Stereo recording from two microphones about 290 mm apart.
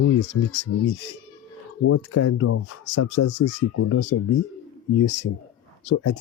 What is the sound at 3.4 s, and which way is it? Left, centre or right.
Speech, left.